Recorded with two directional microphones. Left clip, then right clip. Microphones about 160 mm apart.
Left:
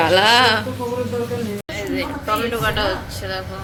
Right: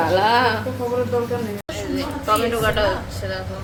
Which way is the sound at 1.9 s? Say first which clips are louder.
Right 2 dB; 20° left (ahead or behind).